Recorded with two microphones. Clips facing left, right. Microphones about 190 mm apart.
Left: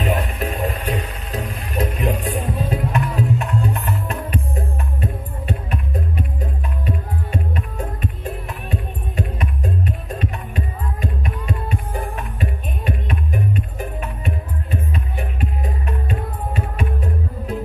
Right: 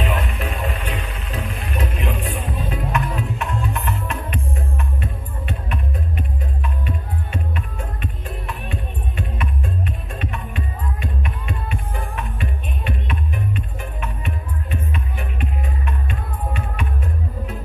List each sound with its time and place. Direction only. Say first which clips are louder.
0.0 s music: left 2 dB; 40° left (ahead or behind)